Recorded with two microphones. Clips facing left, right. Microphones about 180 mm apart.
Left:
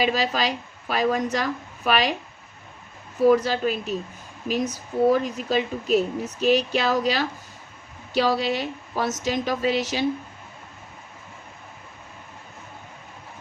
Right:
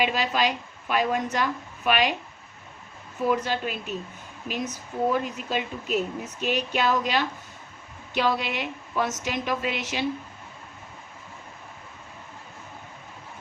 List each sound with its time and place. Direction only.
0.0 s a woman's voice: 35° left (ahead or behind)
3.2 s a woman's voice: 40° left (ahead or behind)